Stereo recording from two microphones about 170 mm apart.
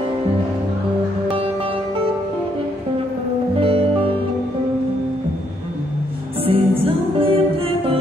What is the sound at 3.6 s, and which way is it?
Music, 30° right (ahead or behind).